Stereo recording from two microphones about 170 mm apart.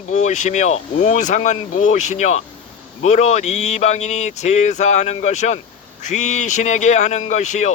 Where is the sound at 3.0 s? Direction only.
40° left (ahead or behind).